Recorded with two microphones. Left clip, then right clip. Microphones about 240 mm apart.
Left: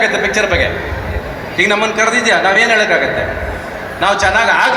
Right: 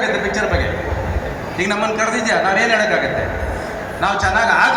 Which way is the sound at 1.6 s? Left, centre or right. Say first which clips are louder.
Left 5 dB; left.